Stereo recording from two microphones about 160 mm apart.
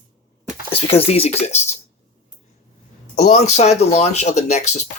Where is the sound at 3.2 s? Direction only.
45° left (ahead or behind).